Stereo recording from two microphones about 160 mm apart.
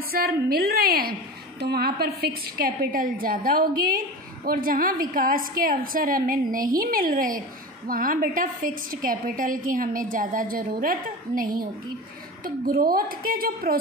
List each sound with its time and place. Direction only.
0.1 s a woman's voice: 70° right (ahead or behind)